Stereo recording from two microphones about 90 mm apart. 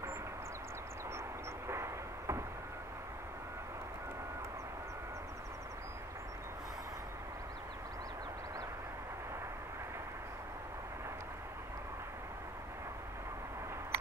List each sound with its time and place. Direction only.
1.7 s vehicle: 30° right (ahead or behind)